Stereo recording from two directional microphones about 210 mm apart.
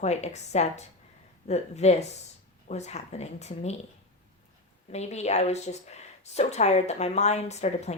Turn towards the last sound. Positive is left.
turn(degrees=30)  # may be behind; listen again after turning